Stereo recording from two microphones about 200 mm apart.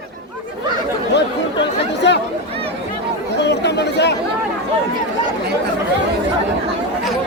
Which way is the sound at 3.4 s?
60° left (ahead or behind).